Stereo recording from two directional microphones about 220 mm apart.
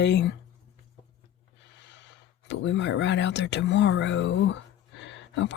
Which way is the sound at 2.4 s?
55° left (ahead or behind).